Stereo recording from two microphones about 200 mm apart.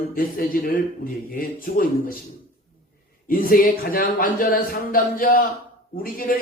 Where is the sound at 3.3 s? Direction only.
45° left (ahead or behind).